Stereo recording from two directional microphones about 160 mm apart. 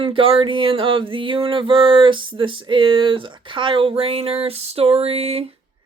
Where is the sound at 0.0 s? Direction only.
35° right (ahead or behind).